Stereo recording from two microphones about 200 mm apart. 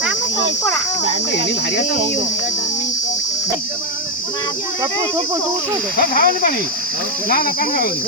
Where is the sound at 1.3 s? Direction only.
60° left (ahead or behind).